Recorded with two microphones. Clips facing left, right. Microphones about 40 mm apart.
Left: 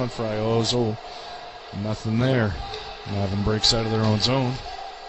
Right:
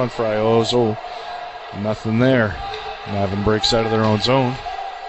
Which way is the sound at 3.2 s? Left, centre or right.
Centre.